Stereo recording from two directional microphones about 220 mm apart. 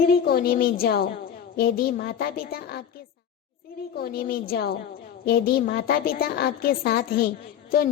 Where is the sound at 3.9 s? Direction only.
45° left (ahead or behind).